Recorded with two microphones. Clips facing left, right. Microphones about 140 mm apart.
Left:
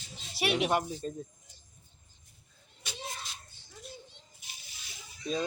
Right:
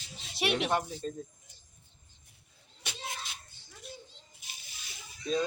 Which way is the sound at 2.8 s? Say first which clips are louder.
Even; 60° right (ahead or behind).